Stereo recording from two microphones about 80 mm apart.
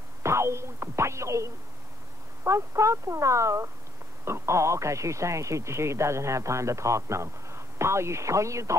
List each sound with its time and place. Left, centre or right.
0.2 s speech: right